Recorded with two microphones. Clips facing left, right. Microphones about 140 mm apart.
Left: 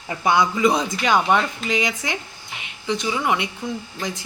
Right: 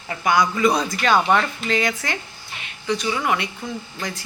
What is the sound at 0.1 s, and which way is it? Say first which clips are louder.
Speech: even; 25° left (ahead or behind).